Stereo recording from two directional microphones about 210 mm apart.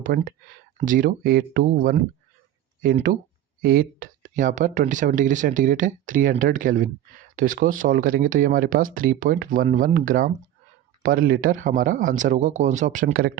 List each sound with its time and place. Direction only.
0.0 s speech: 45° right (ahead or behind)